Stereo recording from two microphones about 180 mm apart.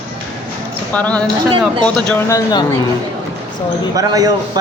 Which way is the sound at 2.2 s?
20° left (ahead or behind).